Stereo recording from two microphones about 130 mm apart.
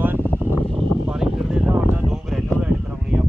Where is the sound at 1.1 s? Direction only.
5° right (ahead or behind).